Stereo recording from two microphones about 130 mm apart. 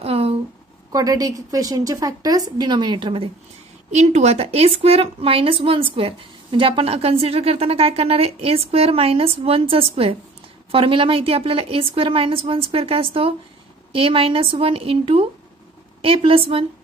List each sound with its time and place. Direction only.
0.0 s a sound: 45° right (ahead or behind)
0.9 s a woman's voice: 30° right (ahead or behind)
3.9 s a woman's voice: 60° right (ahead or behind)